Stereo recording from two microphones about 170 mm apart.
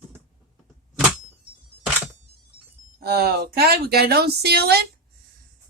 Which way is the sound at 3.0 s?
70° right (ahead or behind).